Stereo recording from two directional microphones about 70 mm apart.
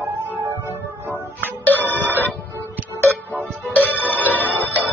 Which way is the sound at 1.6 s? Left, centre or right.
Left.